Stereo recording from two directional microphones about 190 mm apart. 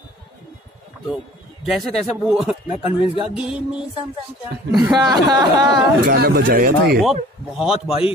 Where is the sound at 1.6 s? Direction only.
Centre (ahead or behind).